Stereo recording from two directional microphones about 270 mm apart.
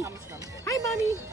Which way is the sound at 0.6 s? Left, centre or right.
Centre.